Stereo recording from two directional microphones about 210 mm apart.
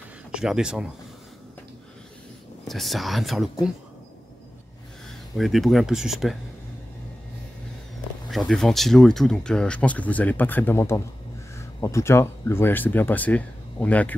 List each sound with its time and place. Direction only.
0.3 s speech: 5° right (ahead or behind)
2.6 s speech: centre (ahead or behind)
5.4 s speech: centre (ahead or behind)
8.3 s speech: centre (ahead or behind)